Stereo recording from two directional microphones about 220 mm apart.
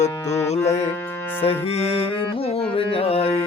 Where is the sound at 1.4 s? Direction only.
25° left (ahead or behind).